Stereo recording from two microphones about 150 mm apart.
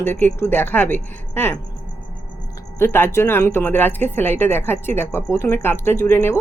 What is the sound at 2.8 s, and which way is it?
Speech, 15° left (ahead or behind).